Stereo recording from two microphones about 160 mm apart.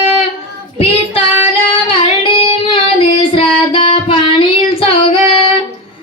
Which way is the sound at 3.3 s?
35° left (ahead or behind).